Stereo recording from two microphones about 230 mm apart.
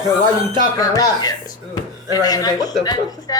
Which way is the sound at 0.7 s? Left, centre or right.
Centre.